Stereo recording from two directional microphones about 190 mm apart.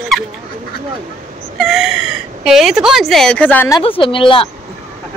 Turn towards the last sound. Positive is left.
turn(degrees=25)  # may be behind; listen again after turning